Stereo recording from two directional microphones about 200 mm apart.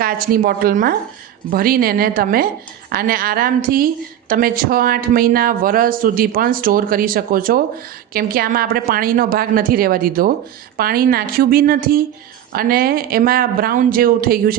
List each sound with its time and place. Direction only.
0.0 s speech: 45° right (ahead or behind)